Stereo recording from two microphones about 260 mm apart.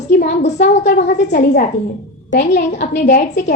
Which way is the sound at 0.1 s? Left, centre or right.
Left.